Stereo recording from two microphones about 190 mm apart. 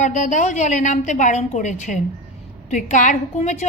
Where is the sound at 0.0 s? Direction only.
40° left (ahead or behind).